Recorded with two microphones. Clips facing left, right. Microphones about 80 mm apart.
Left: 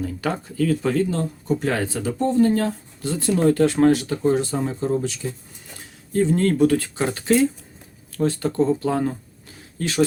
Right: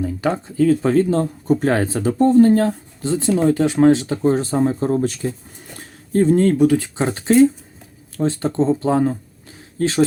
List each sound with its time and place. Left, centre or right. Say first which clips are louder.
0.0 s speech: right 5 dB; right
5.7 s a sound: right 4 dB; right
6.3 s speech: right 3 dB; right